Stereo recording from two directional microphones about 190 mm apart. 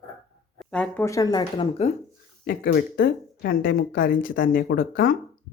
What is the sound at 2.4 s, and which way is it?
Speech, 50° left (ahead or behind).